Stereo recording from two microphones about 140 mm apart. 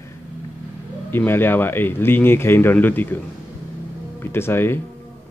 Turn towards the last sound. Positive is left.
turn(degrees=15)  # may be behind; listen again after turning